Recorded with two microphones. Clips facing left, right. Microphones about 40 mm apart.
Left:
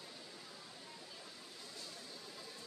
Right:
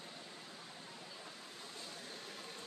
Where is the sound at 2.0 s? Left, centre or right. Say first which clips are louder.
Right 3 dB; right.